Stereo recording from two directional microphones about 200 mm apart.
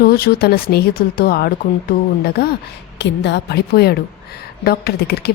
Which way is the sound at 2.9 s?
60° left (ahead or behind).